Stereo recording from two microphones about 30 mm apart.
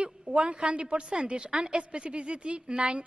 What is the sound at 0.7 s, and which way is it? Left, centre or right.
A woman's voice, right.